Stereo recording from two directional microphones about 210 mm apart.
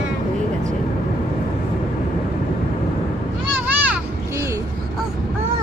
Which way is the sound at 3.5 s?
10° right (ahead or behind).